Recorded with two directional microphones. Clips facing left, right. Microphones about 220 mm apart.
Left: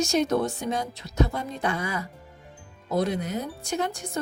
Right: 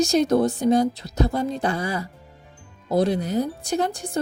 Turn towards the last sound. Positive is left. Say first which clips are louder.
# right 5 dB
turn(degrees=-35)  # may be behind; listen again after turning